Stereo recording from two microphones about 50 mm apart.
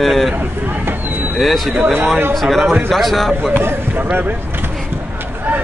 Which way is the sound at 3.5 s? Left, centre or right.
Right.